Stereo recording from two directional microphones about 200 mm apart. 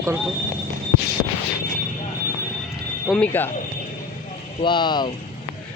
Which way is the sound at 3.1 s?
5° left (ahead or behind).